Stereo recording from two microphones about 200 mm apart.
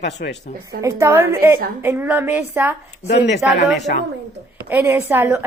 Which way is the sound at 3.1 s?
55° left (ahead or behind).